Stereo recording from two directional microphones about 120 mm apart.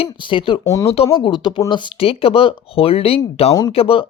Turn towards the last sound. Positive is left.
turn(degrees=50)  # may be behind; listen again after turning